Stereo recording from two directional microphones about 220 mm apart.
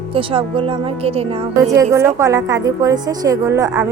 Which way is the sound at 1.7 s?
15° right (ahead or behind).